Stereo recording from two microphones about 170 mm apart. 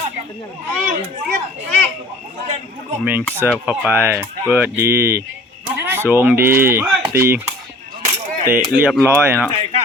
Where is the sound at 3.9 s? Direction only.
15° right (ahead or behind).